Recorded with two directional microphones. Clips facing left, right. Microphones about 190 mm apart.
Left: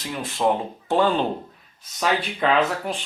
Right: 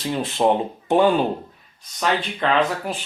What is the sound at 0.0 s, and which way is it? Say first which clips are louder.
Speech: right 3 dB; 25° right (ahead or behind).